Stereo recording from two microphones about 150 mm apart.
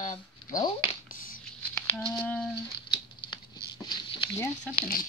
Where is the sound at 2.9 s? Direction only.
30° left (ahead or behind).